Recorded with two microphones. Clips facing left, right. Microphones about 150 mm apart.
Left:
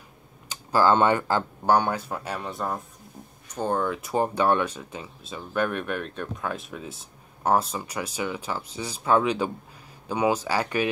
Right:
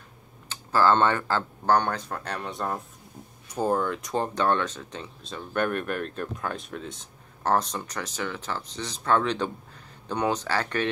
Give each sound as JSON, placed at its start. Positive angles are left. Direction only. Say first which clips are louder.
{"t": 0.5, "sound": "speech", "louder": "left 1 dB", "side_deg": 15}